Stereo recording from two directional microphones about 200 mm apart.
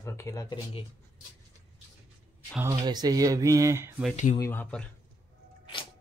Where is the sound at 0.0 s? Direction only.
15° left (ahead or behind).